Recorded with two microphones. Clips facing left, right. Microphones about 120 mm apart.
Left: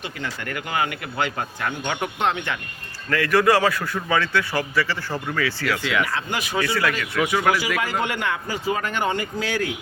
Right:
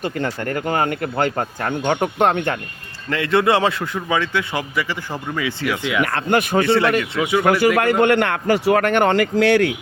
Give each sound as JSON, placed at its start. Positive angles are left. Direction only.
{"t": 0.0, "sound": "speech", "side_deg": -45}
{"t": 3.1, "sound": "a man's voice", "side_deg": -25}
{"t": 6.0, "sound": "speech", "side_deg": -55}
{"t": 7.0, "sound": "a man's voice", "side_deg": -25}
{"t": 7.8, "sound": "a man's voice", "side_deg": -60}